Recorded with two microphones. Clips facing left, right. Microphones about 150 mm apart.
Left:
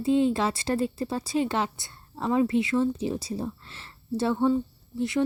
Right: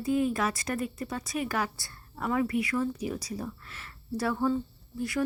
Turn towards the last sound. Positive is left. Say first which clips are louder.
# left 5 dB
turn(degrees=20)  # may be behind; listen again after turning